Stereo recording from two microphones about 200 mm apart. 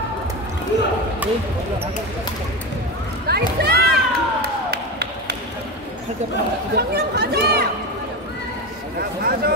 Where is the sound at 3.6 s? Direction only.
50° right (ahead or behind).